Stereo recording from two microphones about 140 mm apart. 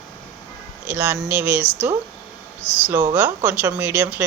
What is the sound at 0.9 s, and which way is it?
Speech, 15° right (ahead or behind).